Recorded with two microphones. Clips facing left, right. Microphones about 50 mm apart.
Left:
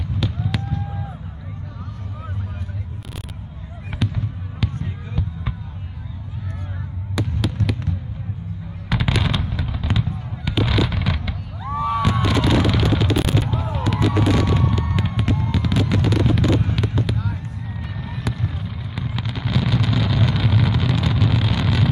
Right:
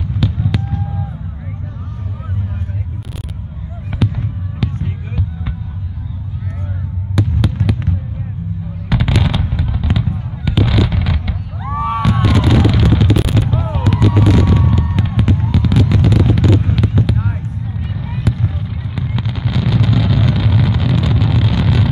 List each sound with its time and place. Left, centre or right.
0.2 s fireworks: centre
4.0 s fireworks: centre
7.2 s fireworks: centre
7.6 s fireworks: right
8.8 s fireworks: centre
11.6 s a sound: right
12.0 s fireworks: centre
17.9 s fireworks: centre